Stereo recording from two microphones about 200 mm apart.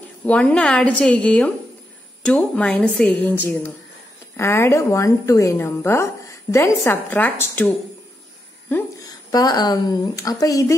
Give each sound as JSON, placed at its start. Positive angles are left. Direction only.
{"t": 0.2, "sound": "a woman's voice", "side_deg": 5}
{"t": 4.4, "sound": "a woman's voice", "side_deg": 15}
{"t": 9.3, "sound": "a woman's voice", "side_deg": 20}